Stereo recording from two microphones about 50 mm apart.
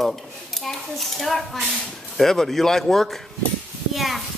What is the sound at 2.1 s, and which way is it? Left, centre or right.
A man's voice, centre.